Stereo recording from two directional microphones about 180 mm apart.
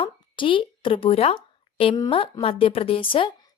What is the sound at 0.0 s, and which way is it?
A woman's voice, 30° left (ahead or behind).